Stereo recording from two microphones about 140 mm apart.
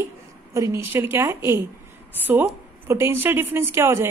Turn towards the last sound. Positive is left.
turn(degrees=-20)  # may be behind; listen again after turning